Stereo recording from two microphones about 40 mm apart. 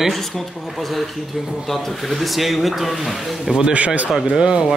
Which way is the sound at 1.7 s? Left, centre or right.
Centre.